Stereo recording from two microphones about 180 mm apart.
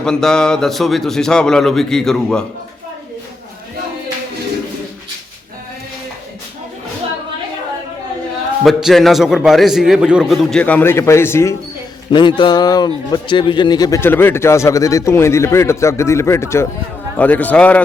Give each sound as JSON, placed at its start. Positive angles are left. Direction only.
{"t": 0.0, "sound": "a man's voice", "side_deg": 5}
{"t": 8.6, "sound": "a man's voice", "side_deg": 0}
{"t": 12.4, "sound": "speech", "side_deg": 25}